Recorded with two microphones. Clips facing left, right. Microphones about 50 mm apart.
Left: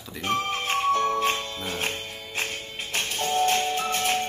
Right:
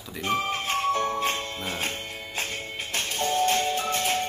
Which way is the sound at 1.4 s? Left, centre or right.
Right.